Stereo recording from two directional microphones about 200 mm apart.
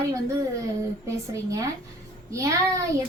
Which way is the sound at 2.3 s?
15° right (ahead or behind).